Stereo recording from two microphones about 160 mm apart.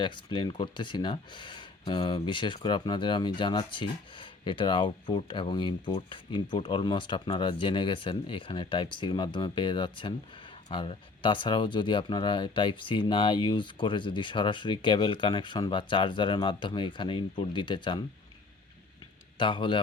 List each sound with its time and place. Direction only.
0.0 s speech: 30° left (ahead or behind)
19.4 s speech: 30° left (ahead or behind)